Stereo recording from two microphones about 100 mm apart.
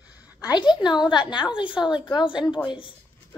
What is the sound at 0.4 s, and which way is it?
A woman's voice, 45° left (ahead or behind).